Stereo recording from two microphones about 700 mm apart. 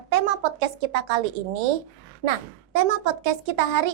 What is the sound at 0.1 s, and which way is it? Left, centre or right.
Speech, right.